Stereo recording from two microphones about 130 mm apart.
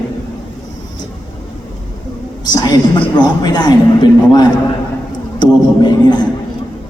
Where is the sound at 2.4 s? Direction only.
30° left (ahead or behind).